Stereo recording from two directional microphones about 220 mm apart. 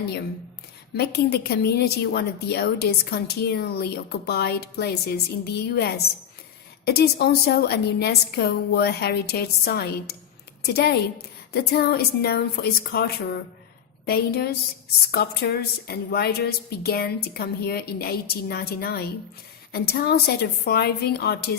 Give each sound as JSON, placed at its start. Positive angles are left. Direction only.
{"t": 0.9, "sound": "a woman's voice", "side_deg": 45}